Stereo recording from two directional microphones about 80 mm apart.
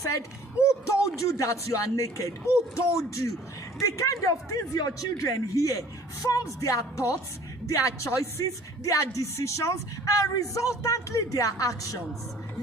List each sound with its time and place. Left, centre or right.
0.0 s a man's voice: left